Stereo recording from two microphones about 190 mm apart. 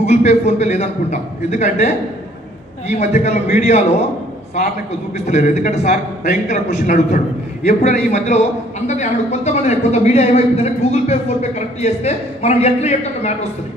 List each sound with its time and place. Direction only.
0.0 s a man's voice: 40° left (ahead or behind)
5.1 s a man's voice: 40° left (ahead or behind)